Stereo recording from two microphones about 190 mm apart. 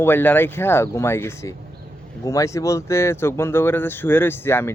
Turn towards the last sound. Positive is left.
turn(degrees=10)  # may be behind; listen again after turning